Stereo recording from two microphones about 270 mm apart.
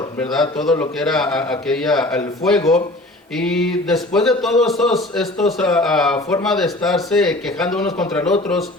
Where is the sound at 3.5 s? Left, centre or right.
Centre.